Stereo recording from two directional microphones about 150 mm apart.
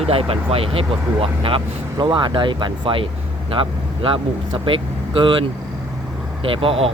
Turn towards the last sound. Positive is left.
turn(degrees=-40)  # may be behind; listen again after turning